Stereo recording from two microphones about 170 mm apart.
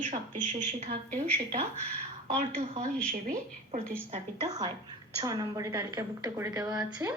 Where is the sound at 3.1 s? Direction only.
50° right (ahead or behind).